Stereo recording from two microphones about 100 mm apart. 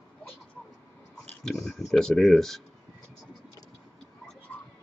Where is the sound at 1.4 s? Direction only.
5° left (ahead or behind).